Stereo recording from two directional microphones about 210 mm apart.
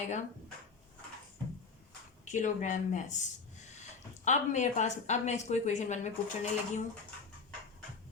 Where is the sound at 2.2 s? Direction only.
35° left (ahead or behind).